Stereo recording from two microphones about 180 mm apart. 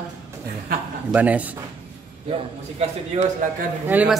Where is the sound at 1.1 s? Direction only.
10° right (ahead or behind).